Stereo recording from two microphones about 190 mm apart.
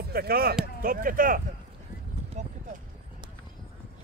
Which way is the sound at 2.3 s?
40° right (ahead or behind).